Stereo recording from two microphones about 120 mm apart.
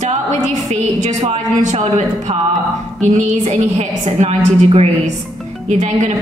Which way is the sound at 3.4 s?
80° right.